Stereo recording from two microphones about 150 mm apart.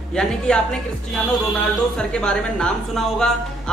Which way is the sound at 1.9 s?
5° left (ahead or behind).